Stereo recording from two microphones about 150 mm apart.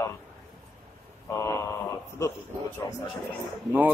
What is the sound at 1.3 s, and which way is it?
Speech, 20° left (ahead or behind).